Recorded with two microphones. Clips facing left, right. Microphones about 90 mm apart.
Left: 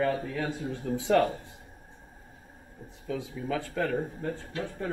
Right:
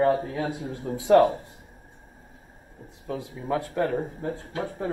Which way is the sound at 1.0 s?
60° right (ahead or behind).